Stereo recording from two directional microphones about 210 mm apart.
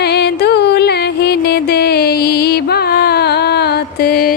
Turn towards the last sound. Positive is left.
turn(degrees=45)  # may be behind; listen again after turning